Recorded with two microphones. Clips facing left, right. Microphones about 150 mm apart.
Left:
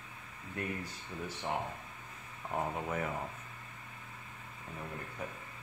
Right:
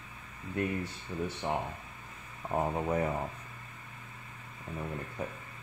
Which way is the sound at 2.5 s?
30° right (ahead or behind).